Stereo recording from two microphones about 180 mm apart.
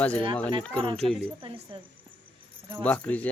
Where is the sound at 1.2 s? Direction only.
30° right (ahead or behind).